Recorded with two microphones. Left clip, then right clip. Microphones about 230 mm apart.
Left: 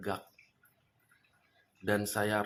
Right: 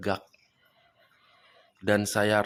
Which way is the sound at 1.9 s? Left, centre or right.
Right.